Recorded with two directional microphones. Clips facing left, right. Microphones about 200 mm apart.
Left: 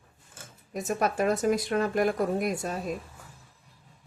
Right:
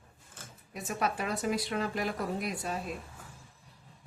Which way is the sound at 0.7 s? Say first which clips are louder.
Left 5 dB; 45° left (ahead or behind).